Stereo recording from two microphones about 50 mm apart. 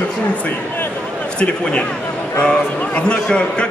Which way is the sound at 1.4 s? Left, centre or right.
Left.